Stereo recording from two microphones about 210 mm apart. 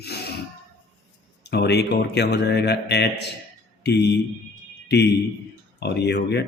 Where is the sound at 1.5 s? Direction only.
50° left (ahead or behind).